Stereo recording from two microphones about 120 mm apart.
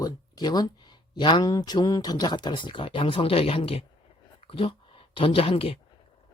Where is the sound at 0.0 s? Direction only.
35° left (ahead or behind).